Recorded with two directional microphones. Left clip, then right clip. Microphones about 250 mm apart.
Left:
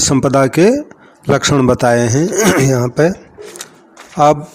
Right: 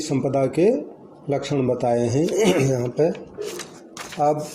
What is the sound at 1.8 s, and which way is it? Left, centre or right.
Speech, left.